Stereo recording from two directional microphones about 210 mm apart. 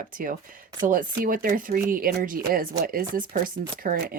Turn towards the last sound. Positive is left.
turn(degrees=-40)  # may be behind; listen again after turning